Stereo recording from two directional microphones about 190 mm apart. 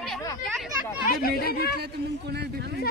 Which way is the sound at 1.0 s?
50° left (ahead or behind).